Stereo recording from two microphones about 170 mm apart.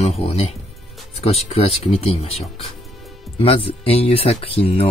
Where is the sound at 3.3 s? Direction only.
35° left (ahead or behind).